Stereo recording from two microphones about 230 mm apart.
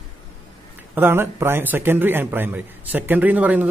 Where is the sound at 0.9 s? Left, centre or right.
Centre.